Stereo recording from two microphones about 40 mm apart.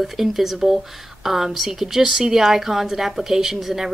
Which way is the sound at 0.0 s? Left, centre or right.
Centre.